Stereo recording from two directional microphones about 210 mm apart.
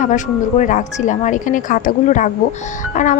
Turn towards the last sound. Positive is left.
turn(degrees=35)  # may be behind; listen again after turning